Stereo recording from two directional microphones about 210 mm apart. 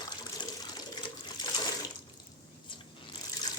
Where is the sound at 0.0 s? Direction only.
20° left (ahead or behind).